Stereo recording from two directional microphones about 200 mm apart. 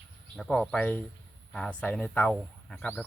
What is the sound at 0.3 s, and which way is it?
Speech, centre (ahead or behind).